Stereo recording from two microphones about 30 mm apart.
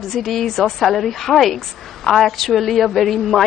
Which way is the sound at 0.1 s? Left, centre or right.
Centre.